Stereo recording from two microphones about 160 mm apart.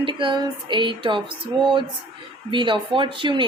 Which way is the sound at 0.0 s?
30° right (ahead or behind).